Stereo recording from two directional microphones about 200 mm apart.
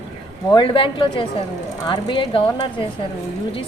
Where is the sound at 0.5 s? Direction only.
25° left (ahead or behind).